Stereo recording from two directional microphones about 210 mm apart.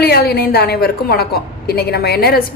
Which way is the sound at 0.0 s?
50° left (ahead or behind).